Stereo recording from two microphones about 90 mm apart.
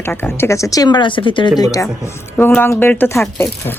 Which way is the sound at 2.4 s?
25° left (ahead or behind).